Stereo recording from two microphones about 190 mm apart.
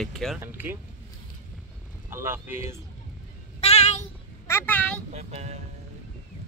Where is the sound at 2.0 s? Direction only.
10° right (ahead or behind).